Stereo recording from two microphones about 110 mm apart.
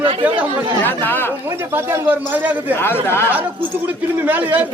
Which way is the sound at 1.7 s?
20° right (ahead or behind).